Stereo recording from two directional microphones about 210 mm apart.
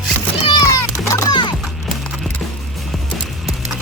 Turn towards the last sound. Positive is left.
turn(degrees=0)  # may be behind; listen again after turning